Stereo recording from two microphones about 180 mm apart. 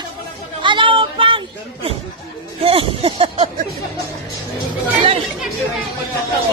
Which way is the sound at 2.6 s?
30° right (ahead or behind).